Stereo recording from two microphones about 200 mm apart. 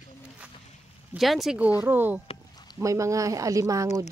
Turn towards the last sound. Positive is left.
turn(degrees=-15)  # may be behind; listen again after turning